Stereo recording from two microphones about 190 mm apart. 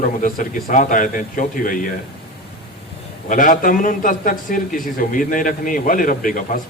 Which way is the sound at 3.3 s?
45° left (ahead or behind).